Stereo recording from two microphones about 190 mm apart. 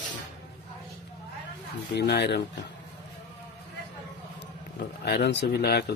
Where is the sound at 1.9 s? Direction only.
60° left (ahead or behind).